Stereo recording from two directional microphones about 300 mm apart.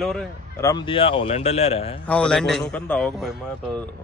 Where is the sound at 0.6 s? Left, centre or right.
Centre.